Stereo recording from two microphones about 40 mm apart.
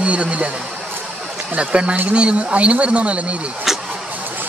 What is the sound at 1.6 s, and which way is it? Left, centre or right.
A man's voice, right.